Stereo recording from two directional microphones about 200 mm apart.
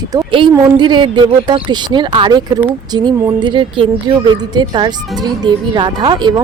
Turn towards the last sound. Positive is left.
turn(degrees=-20)  # may be behind; listen again after turning